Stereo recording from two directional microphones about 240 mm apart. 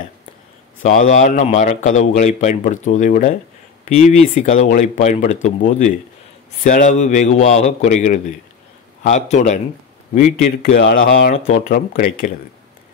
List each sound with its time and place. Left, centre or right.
0.8 s a man's voice: left
10.8 s a man's voice: left